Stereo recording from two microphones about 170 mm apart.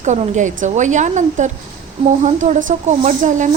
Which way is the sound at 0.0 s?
45° right (ahead or behind).